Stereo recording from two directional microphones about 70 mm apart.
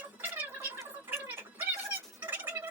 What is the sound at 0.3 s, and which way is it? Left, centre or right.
Fowl, right.